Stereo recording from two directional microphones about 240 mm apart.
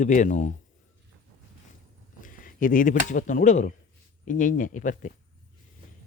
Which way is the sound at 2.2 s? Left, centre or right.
Left.